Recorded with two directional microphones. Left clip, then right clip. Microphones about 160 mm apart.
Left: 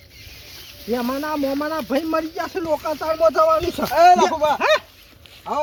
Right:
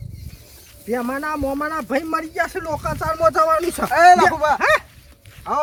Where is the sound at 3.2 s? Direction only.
35° right (ahead or behind).